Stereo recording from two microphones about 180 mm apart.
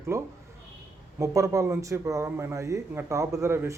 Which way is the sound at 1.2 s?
20° right (ahead or behind).